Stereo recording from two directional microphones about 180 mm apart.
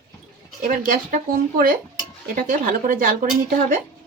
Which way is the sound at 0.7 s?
50° right (ahead or behind).